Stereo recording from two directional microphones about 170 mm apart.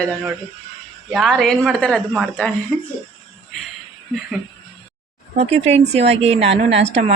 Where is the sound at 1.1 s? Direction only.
Centre (ahead or behind).